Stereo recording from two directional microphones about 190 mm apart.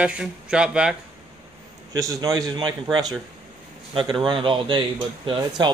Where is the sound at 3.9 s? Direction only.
25° right (ahead or behind).